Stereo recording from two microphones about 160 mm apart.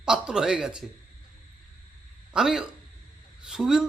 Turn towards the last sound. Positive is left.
turn(degrees=-5)  # may be behind; listen again after turning